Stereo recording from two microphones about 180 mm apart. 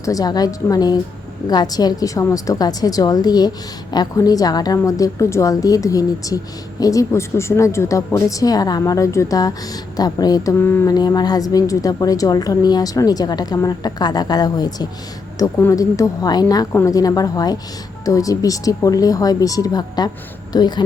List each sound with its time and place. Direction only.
0.0 s a woman's voice: 20° left (ahead or behind)